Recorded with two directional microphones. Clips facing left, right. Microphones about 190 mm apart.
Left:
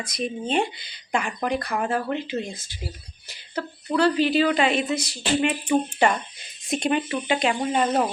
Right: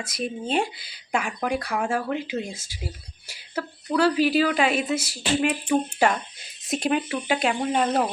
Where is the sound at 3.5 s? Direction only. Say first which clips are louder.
Even; 5° right (ahead or behind).